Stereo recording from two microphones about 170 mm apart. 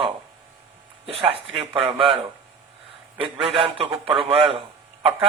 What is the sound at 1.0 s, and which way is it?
Speech, 35° right (ahead or behind).